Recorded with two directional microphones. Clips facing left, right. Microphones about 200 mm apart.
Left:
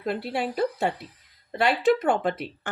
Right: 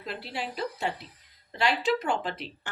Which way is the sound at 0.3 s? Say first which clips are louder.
Left 6 dB; 55° left (ahead or behind).